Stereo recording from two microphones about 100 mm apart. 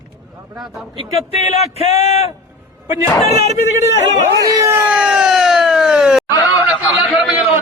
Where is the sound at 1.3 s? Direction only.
90° left.